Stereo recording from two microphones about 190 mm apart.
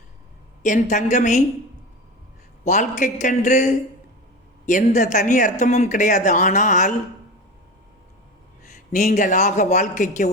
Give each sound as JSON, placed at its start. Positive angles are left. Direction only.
{"t": 0.6, "sound": "speech", "side_deg": 40}
{"t": 2.6, "sound": "speech", "side_deg": 40}
{"t": 8.7, "sound": "speech", "side_deg": 40}